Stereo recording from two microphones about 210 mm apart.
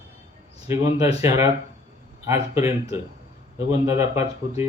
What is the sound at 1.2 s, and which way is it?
Speech, 15° right (ahead or behind).